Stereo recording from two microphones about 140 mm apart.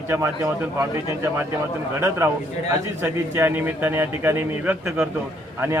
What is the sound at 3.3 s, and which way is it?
A man's voice, 15° right (ahead or behind).